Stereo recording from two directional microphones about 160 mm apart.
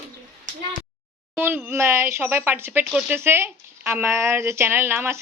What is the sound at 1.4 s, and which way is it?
A woman's voice, 10° right (ahead or behind).